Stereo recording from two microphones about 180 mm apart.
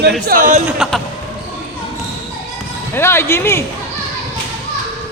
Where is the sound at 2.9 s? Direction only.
15° left (ahead or behind).